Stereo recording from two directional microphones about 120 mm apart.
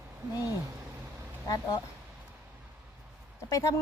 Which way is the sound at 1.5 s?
30° left (ahead or behind).